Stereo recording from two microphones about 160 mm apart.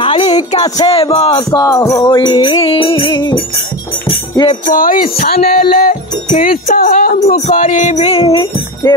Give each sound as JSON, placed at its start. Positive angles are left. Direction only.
{"t": 0.0, "sound": "music", "side_deg": 35}
{"t": 0.7, "sound": "music", "side_deg": 30}
{"t": 4.5, "sound": "speech", "side_deg": 60}
{"t": 7.2, "sound": "music", "side_deg": 40}